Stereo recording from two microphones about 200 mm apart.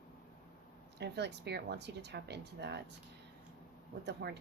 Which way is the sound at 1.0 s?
60° right (ahead or behind).